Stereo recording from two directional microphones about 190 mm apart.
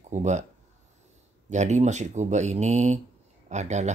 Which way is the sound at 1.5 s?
40° right (ahead or behind).